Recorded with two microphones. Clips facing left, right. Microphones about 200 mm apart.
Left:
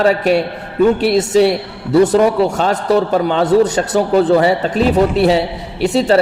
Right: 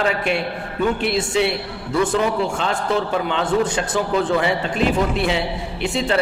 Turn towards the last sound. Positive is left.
turn(degrees=40)  # may be behind; listen again after turning